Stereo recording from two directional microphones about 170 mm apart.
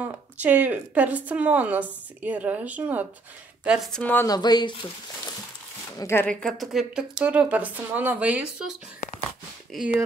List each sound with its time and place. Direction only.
0.0 s a woman's voice: 10° right (ahead or behind); by 4.3 s 10° left (ahead or behind)
4.3 s speech: 25° left (ahead or behind)
5.9 s speech: 15° left (ahead or behind)
6.4 s a woman's voice: centre (ahead or behind)